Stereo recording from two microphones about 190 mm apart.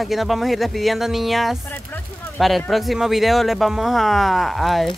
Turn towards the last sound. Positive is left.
turn(degrees=0)  # may be behind; listen again after turning